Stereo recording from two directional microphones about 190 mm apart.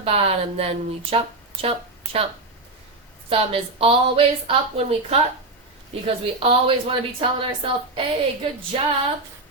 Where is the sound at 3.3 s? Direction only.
30° right (ahead or behind).